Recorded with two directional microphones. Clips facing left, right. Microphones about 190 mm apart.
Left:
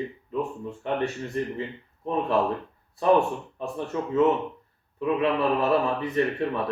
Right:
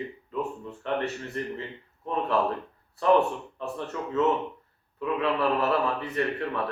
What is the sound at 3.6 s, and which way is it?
A man's voice, 15° left (ahead or behind).